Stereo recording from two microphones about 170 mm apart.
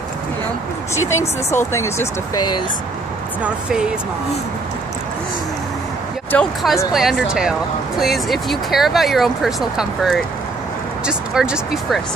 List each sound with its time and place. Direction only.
0.9 s speech: 15° left (ahead or behind)
3.4 s speech: 5° right (ahead or behind)
6.3 s speech: centre (ahead or behind)